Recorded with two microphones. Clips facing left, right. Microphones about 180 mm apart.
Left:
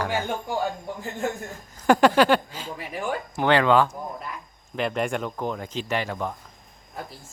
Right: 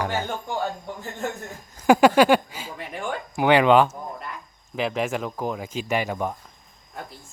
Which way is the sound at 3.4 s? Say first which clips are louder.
Right 3 dB; 15° right (ahead or behind).